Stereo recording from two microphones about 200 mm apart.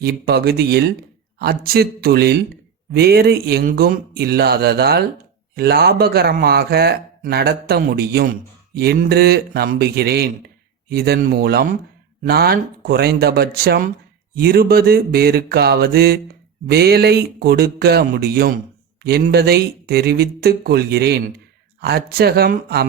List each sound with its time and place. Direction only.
0.0 s a man's voice: 55° right (ahead or behind)